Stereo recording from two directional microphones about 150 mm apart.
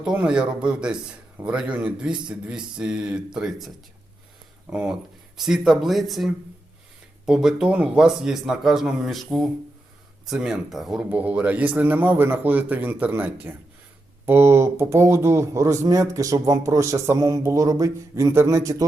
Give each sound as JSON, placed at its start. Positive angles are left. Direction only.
{"t": 0.0, "sound": "a man's voice", "side_deg": -5}
{"t": 4.7, "sound": "a man's voice", "side_deg": -10}